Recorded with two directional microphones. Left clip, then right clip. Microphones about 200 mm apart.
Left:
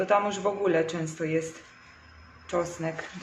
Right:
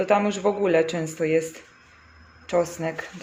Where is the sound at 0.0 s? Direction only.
35° right (ahead or behind).